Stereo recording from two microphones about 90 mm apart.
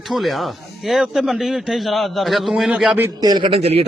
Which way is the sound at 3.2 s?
55° right (ahead or behind).